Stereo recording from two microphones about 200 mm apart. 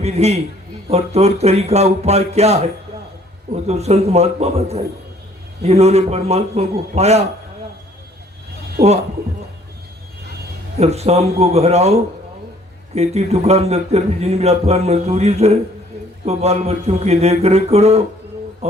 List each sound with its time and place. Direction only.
0.0 s a man's voice: 30° right (ahead or behind)
10.8 s a man's voice: 30° right (ahead or behind)